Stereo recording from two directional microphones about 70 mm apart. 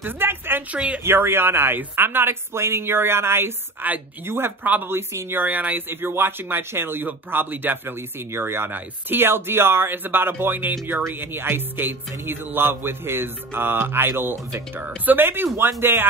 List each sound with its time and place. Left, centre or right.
0.0 s speech: right
0.7 s speech: centre
1.0 s speech: right